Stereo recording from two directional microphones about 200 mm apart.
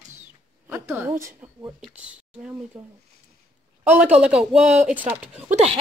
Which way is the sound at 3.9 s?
5° right (ahead or behind).